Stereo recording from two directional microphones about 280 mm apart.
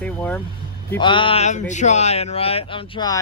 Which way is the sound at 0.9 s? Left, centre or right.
Centre.